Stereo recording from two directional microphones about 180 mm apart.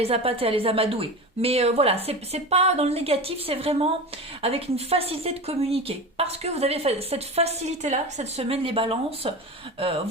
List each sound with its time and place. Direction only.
0.0 s speech: 35° right (ahead or behind)